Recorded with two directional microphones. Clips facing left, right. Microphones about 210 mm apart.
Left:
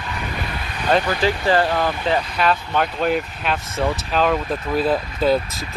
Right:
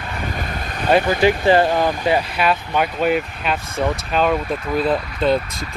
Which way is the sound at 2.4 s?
5° right (ahead or behind).